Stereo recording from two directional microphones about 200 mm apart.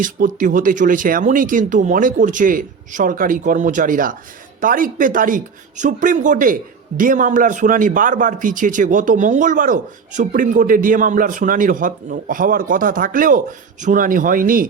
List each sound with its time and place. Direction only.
0.0 s speech: 40° right (ahead or behind)